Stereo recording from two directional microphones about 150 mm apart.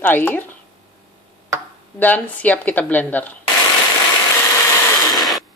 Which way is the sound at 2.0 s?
10° left (ahead or behind).